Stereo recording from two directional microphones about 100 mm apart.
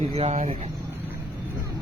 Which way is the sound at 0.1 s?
85° right.